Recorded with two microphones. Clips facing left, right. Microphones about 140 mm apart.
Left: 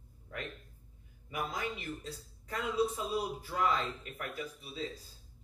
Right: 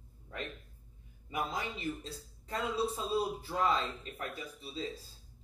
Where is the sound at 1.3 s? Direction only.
25° right (ahead or behind).